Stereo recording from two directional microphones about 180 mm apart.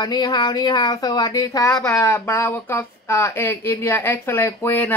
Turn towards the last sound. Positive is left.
turn(degrees=10)  # may be behind; listen again after turning